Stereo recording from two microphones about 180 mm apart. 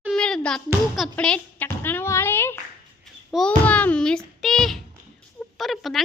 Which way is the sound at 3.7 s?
10° left (ahead or behind).